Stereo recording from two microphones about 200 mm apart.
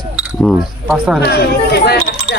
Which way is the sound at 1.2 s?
55° left (ahead or behind).